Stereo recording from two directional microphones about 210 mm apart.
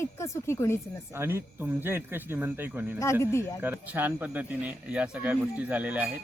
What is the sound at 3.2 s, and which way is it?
Speech, 15° left (ahead or behind).